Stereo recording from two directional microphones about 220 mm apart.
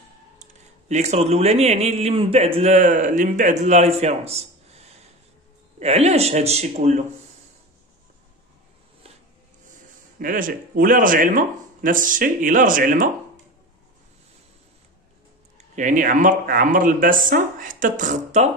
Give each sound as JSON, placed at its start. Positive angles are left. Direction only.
{"t": 0.4, "sound": "speech", "side_deg": -30}
{"t": 10.1, "sound": "speech", "side_deg": -40}
{"t": 15.5, "sound": "speech", "side_deg": -35}